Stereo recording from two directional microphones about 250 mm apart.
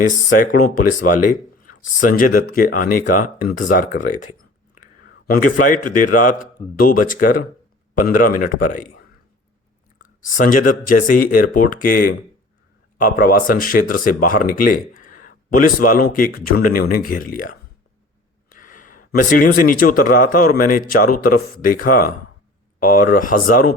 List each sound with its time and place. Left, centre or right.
0.6 s a man's voice: left
10.2 s speech: left
18.8 s a sound: left
19.7 s speech: left